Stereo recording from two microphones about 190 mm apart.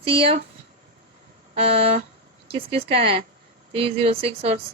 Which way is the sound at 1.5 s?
30° right (ahead or behind).